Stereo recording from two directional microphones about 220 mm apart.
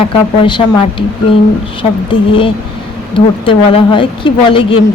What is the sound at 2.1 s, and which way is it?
Speech, 25° left (ahead or behind).